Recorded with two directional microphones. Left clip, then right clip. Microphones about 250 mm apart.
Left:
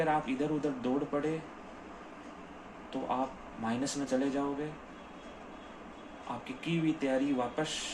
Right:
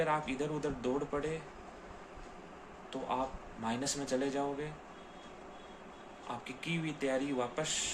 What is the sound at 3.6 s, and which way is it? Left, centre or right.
Speech, centre.